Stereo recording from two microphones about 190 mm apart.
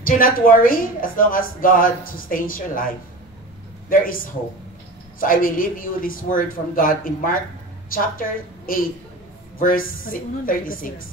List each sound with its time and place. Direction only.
0.0 s a woman's voice: 45° left (ahead or behind)